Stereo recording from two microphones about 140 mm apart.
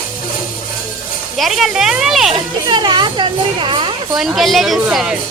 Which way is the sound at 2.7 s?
30° right (ahead or behind).